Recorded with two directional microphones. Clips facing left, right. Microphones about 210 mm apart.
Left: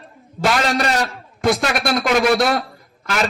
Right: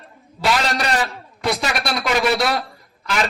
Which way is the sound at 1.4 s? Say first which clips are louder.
Left 5 dB; 50° left (ahead or behind).